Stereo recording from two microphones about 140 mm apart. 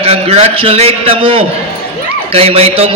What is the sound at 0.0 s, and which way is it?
A man's voice, 45° right (ahead or behind).